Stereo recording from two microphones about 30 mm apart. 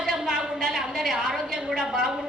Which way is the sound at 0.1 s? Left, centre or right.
Right.